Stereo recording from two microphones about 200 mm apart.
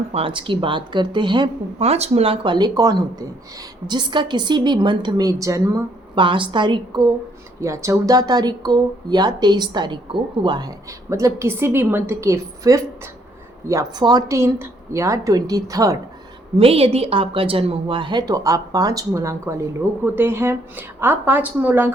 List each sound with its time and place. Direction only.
0.1 s a woman's voice: 25° right (ahead or behind)
16.6 s a woman's voice: 30° right (ahead or behind); by 21.9 s 10° right (ahead or behind)